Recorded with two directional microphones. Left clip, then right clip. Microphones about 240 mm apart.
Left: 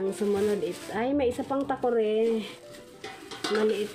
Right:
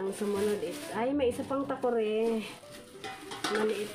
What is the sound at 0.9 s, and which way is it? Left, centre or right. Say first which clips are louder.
Speech: left 2 dB; left.